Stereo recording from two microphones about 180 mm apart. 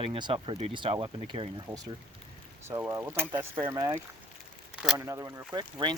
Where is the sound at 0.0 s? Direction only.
30° right (ahead or behind).